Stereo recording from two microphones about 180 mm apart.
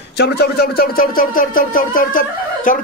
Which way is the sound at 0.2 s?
60° left (ahead or behind).